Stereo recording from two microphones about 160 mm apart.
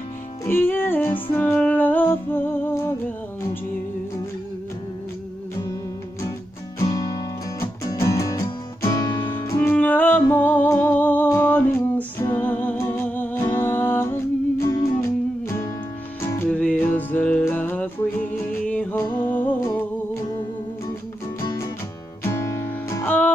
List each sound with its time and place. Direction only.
0.5 s music: 15° left (ahead or behind)
6.8 s music: 20° left (ahead or behind)
22.2 s music: 20° left (ahead or behind)